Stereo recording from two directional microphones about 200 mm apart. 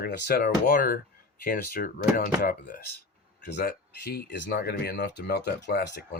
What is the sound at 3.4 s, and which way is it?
Speech, 50° left (ahead or behind).